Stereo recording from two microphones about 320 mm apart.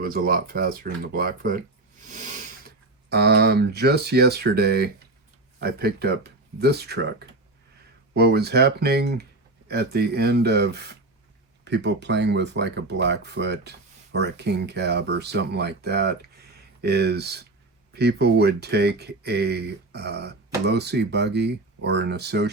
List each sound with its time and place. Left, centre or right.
0.0 s speech: right
8.1 s speech: right